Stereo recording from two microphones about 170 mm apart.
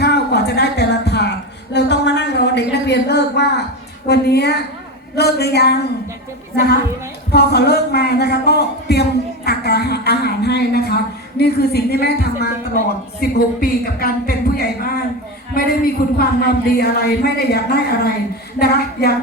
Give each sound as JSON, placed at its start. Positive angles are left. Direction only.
{"t": 0.0, "sound": "a sound", "side_deg": 75}
{"t": 4.0, "sound": "speech", "side_deg": 70}
{"t": 7.3, "sound": "a woman's voice", "side_deg": 70}